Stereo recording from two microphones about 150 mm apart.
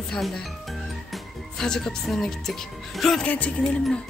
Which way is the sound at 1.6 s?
5° left (ahead or behind).